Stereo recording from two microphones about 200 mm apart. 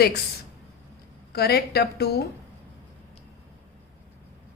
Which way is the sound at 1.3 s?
50° left (ahead or behind).